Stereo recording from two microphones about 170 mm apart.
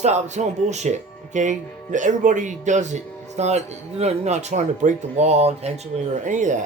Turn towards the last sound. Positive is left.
turn(degrees=-45)  # may be behind; listen again after turning